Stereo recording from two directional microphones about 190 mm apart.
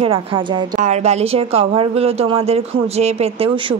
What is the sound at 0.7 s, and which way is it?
A woman's voice, 35° right (ahead or behind).